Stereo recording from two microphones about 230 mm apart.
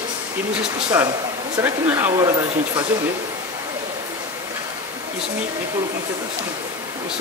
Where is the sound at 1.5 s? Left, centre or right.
Centre.